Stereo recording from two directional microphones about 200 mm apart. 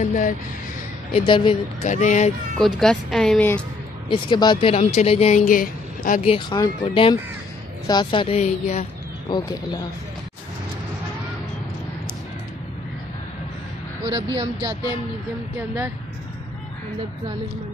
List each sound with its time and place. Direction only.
0.0 s a sound: 40° left (ahead or behind)
1.1 s speech: 25° left (ahead or behind)
2.5 s speech: centre (ahead or behind)
4.1 s speech: 20° left (ahead or behind)
5.4 s a woman's voice: 45° left (ahead or behind)
6.2 s speech: 25° left (ahead or behind)
9.3 s speech: 20° left (ahead or behind)
14.0 s speech: 25° right (ahead or behind)